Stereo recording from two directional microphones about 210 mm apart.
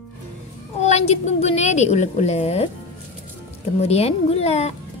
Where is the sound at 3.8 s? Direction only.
30° left (ahead or behind).